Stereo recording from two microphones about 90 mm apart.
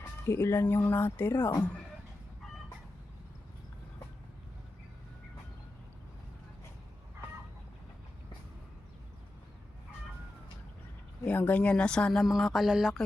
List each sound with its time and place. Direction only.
0.0 s speech: 25° left (ahead or behind)
11.3 s speech: 15° left (ahead or behind)
12.3 s a sound: centre (ahead or behind)